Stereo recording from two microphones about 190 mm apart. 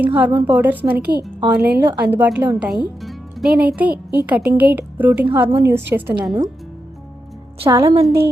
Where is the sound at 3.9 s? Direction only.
55° right (ahead or behind).